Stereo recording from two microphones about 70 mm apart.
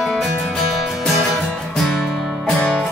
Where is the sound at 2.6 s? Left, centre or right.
Centre.